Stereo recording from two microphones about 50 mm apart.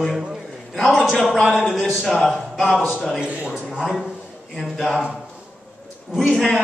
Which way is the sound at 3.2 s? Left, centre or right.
Centre.